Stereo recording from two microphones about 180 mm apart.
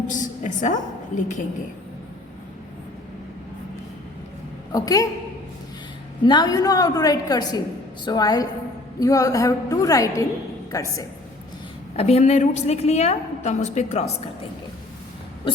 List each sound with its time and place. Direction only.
0.1 s a woman's voice: 45° left (ahead or behind)
4.7 s a woman's voice: 20° left (ahead or behind)
6.2 s a woman's voice: 25° left (ahead or behind)
11.9 s a woman's voice: 35° left (ahead or behind)